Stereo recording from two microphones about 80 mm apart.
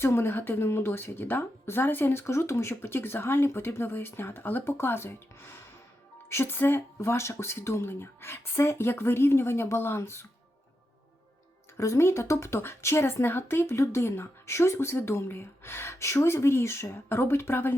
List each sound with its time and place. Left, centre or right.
0.0 s a woman's voice: left
11.8 s a woman's voice: left